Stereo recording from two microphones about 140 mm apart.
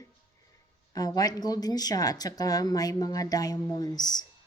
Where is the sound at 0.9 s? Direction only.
25° left (ahead or behind).